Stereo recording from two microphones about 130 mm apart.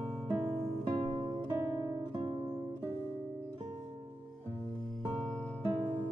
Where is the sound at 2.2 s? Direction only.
40° right (ahead or behind).